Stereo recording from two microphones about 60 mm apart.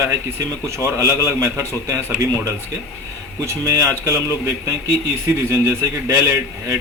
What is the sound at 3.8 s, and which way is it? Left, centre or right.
Speech, right.